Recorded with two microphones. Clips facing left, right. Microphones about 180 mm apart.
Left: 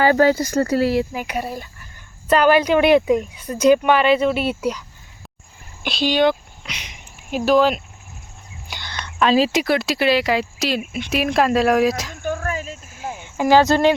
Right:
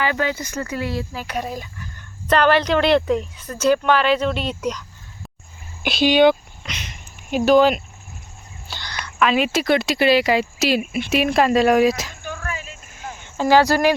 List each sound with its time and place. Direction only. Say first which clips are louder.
0.0 s speech: left 8 dB; 40° left (ahead or behind)
1.1 s speech: left 1 dB; 10° left (ahead or behind)
5.8 s speech: right 3 dB; centre (ahead or behind)
6.7 s a sound: right 2 dB; 10° left (ahead or behind)
7.3 s speech: right 2 dB; centre (ahead or behind)
8.6 s whispering: even; 20° left (ahead or behind)
9.1 s speech: left 2 dB; 30° left (ahead or behind)
9.6 s speech: right 1 dB; centre (ahead or behind)
12.2 s a sound: left 6 dB; 45° left (ahead or behind)
13.1 s a sound: left 1 dB; 15° left (ahead or behind)